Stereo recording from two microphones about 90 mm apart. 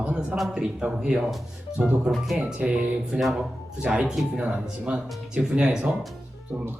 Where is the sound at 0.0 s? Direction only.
10° right (ahead or behind).